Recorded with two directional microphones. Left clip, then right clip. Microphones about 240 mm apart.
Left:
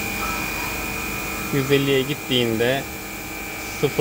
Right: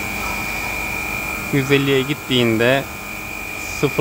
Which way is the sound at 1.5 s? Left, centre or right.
Right.